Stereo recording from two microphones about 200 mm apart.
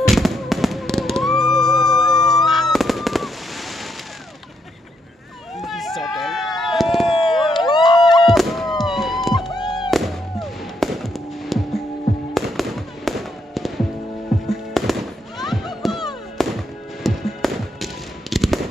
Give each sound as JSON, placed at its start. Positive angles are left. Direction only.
{"t": 0.0, "sound": "fireworks", "side_deg": 0}
{"t": 5.6, "sound": "a sound", "side_deg": 0}
{"t": 7.4, "sound": "a sound", "side_deg": 20}
{"t": 8.4, "sound": "fireworks", "side_deg": 0}
{"t": 9.5, "sound": "music", "side_deg": 20}
{"t": 9.8, "sound": "fireworks", "side_deg": 0}
{"t": 16.3, "sound": "music", "side_deg": 0}